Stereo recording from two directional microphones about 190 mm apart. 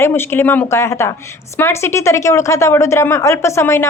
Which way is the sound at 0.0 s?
10° left (ahead or behind).